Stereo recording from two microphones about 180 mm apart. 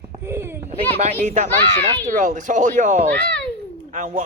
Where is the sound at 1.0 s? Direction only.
40° right (ahead or behind).